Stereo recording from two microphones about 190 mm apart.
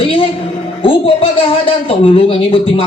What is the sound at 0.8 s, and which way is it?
Speech, 30° left (ahead or behind).